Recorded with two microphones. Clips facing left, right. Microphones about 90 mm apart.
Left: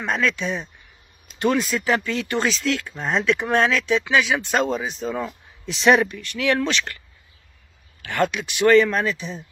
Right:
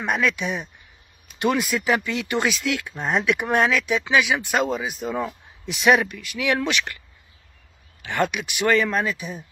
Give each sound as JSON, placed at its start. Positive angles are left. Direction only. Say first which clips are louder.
{"t": 0.0, "sound": "speech", "louder": "even", "side_deg": -15}
{"t": 5.0, "sound": "speech", "louder": "even", "side_deg": -15}
{"t": 5.9, "sound": "speech", "louder": "left 2 dB", "side_deg": 0}
{"t": 8.0, "sound": "speech", "louder": "left 1 dB", "side_deg": -20}